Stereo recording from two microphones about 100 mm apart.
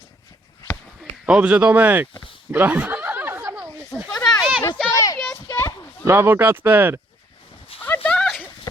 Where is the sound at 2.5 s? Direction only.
20° right (ahead or behind).